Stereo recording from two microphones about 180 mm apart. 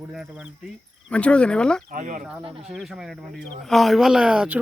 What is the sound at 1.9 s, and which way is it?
Speech, 45° right (ahead or behind).